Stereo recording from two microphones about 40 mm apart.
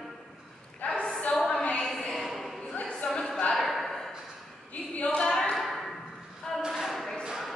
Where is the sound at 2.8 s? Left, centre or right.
Left.